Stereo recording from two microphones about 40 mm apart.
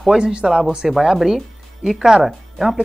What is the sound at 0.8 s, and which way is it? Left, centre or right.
Speech, centre.